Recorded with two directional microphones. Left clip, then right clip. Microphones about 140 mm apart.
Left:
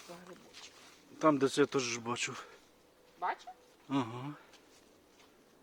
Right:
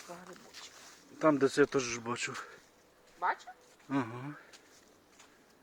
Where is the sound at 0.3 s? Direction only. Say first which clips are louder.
Right 2 dB; 75° right (ahead or behind).